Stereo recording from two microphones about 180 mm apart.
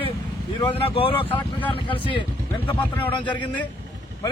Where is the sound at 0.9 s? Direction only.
30° left (ahead or behind).